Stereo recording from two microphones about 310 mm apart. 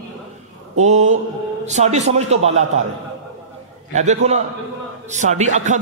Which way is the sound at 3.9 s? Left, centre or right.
Right.